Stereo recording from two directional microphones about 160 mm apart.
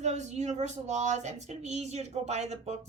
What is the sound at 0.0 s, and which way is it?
Speech, 45° right (ahead or behind).